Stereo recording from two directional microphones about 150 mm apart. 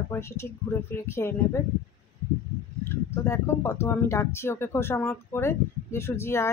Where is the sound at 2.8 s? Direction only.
20° left (ahead or behind).